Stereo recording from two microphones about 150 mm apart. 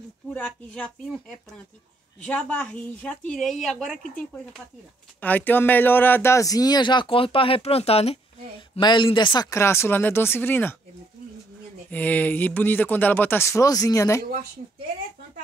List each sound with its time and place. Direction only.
0.3 s speech: 5° left (ahead or behind)
5.2 s speech: 10° left (ahead or behind)
11.9 s speech: 10° left (ahead or behind)